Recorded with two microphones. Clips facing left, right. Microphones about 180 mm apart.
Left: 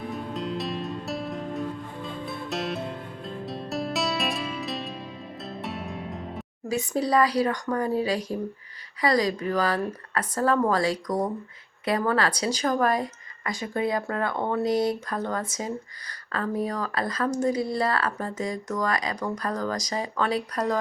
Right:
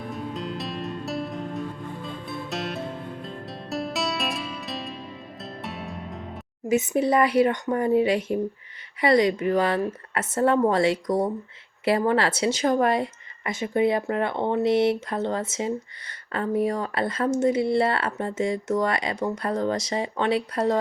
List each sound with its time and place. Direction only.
0.1 s music: centre (ahead or behind)
6.7 s speech: 20° right (ahead or behind)